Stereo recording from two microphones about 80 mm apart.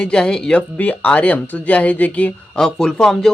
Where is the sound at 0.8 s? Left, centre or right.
Centre.